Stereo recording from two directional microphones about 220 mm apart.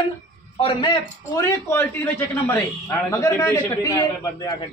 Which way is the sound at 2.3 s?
10° left (ahead or behind).